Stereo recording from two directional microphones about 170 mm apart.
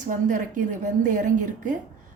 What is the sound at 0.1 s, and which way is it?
A woman's voice, 50° right (ahead or behind).